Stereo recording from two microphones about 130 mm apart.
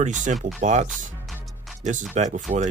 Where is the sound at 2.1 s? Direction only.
60° right (ahead or behind).